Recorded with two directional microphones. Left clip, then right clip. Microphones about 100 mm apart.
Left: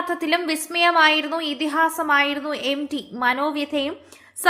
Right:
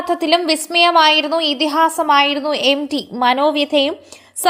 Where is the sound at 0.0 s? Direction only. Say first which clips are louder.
Right 7 dB; 30° right (ahead or behind).